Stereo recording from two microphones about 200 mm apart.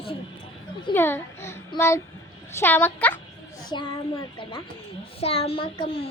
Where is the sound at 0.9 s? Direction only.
10° left (ahead or behind).